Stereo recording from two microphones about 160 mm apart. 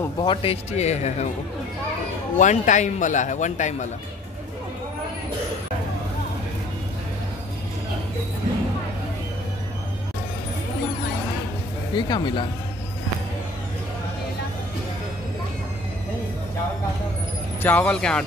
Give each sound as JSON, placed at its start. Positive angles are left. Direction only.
{"t": 0.2, "sound": "a man's voice", "side_deg": 35}
{"t": 2.3, "sound": "a man's voice", "side_deg": 50}
{"t": 11.9, "sound": "speech", "side_deg": 30}
{"t": 17.6, "sound": "speech", "side_deg": 10}